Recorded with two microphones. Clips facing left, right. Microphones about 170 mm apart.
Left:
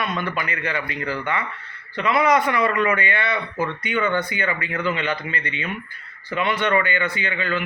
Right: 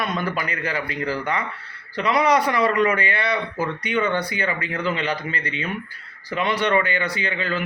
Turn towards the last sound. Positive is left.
turn(degrees=-35)  # may be behind; listen again after turning